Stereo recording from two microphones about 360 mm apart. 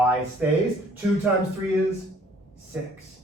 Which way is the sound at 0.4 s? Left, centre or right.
Centre.